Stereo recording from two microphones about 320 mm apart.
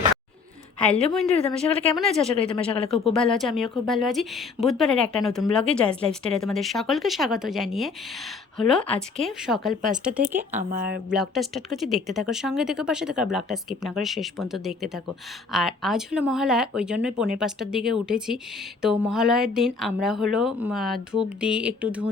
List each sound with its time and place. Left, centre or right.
1.1 s speech: centre
10.6 s speech: right
11.1 s speech: centre